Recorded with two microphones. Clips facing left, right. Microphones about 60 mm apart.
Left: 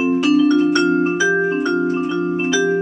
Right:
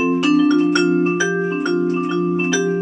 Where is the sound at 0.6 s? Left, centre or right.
Centre.